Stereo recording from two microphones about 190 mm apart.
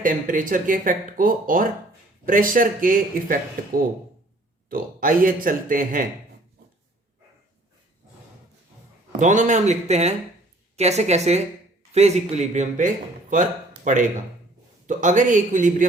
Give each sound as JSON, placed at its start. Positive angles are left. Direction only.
{"t": 0.0, "sound": "speech", "side_deg": -45}
{"t": 4.7, "sound": "speech", "side_deg": -45}
{"t": 9.1, "sound": "a man's voice", "side_deg": -40}